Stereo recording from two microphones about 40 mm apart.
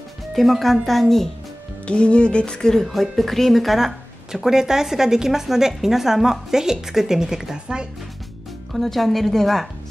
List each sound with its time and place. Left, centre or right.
0.3 s a woman's voice: centre
1.9 s speech: left; by 7.9 s right
8.7 s a woman's voice: centre